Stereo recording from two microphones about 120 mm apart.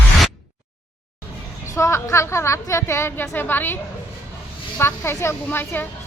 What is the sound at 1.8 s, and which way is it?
A woman's voice, 25° left (ahead or behind).